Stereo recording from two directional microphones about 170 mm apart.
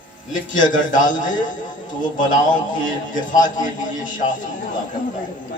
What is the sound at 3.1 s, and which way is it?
A man's voice, 50° left (ahead or behind).